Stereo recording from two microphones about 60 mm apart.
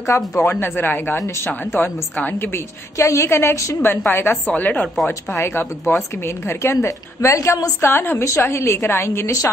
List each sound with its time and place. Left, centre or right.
0.4 s speech: left
3.0 s a woman's voice: left
3.8 s speech: left
4.6 s speech: left
4.8 s speech: centre
5.3 s a woman's voice: left
7.3 s a woman's voice: left
7.8 s a woman's voice: left